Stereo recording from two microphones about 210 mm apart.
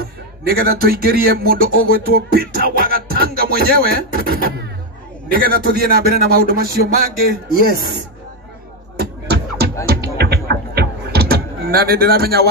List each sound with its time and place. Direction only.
0.0 s speech: 50° right (ahead or behind)
8.9 s beatboxing: 50° right (ahead or behind)
9.8 s music: 50° right (ahead or behind)